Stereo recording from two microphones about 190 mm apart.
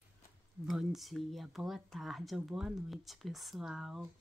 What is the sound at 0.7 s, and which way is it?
Speech, centre (ahead or behind).